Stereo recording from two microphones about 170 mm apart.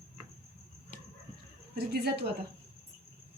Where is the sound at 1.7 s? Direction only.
70° right (ahead or behind).